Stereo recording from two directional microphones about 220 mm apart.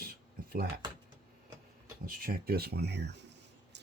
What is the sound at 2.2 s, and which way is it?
Speech, 45° right (ahead or behind).